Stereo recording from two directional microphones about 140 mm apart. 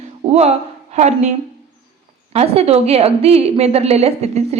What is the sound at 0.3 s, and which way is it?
A woman's voice, 50° right (ahead or behind).